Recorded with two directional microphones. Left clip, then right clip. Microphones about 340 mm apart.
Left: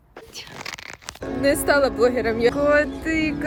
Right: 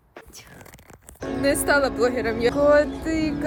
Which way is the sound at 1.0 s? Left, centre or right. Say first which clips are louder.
Left 2 dB; centre.